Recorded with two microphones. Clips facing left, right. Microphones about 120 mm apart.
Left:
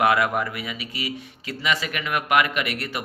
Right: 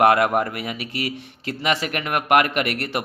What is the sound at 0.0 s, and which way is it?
Speech, 50° right (ahead or behind).